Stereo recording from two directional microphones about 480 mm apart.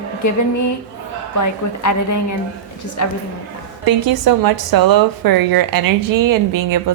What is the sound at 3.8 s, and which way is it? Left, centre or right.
A woman's voice, right.